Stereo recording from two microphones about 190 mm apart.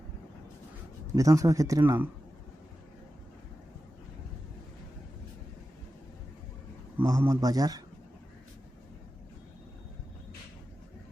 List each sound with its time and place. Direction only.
1.1 s speech: 15° right (ahead or behind)
6.9 s speech: 15° right (ahead or behind)